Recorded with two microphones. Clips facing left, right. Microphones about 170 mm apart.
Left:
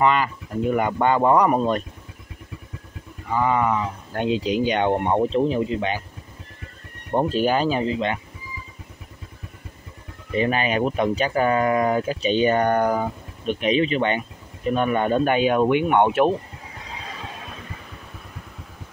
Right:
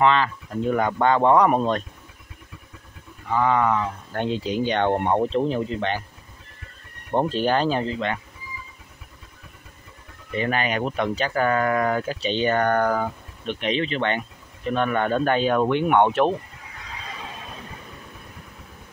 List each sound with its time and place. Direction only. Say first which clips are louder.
0.0 s speech: even; 10° left (ahead or behind)
3.3 s speech: even; 10° left (ahead or behind)
4.3 s speech: left 5 dB; 90° left
4.6 s speech: right 1 dB; 15° left (ahead or behind)
4.9 s speech: left 1 dB; centre (ahead or behind)
7.1 s speech: left 1 dB; 5° left (ahead or behind)
10.3 s speech: left 3 dB; 20° left (ahead or behind)